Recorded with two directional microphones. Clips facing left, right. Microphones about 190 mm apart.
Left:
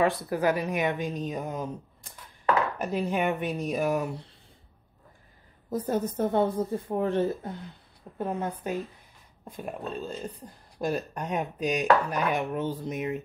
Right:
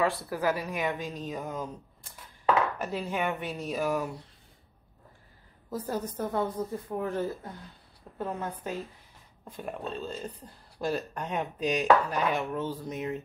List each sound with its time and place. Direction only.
0.3 s a woman's voice: 20° left (ahead or behind)
2.8 s a woman's voice: 20° left (ahead or behind)
5.7 s a woman's voice: 20° left (ahead or behind)
8.2 s chopping: 20° left (ahead or behind)